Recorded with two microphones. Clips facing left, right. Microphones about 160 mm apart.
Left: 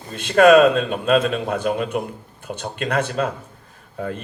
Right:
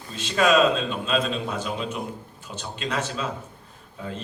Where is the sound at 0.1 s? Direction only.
55° left (ahead or behind).